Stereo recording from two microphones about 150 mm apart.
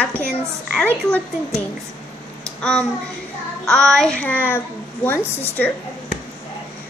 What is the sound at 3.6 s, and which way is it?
A woman's voice, 5° left (ahead or behind).